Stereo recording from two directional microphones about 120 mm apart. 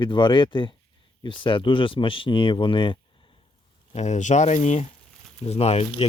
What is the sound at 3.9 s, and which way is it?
Speech, 75° left (ahead or behind).